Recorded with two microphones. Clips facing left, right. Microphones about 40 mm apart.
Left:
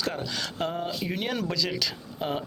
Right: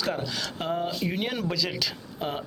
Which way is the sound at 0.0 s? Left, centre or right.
Centre.